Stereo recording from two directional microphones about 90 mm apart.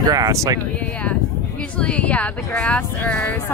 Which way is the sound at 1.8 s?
15° left (ahead or behind).